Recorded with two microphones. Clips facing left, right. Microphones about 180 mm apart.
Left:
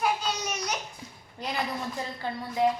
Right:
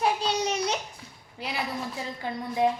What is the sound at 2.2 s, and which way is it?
Speech, 15° right (ahead or behind).